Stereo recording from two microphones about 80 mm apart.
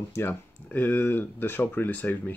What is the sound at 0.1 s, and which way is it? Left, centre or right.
Speech, left.